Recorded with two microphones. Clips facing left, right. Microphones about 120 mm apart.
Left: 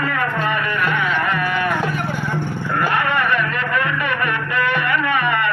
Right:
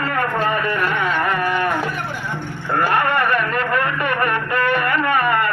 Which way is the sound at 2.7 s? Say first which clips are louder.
Right 2 dB; 45° right (ahead or behind).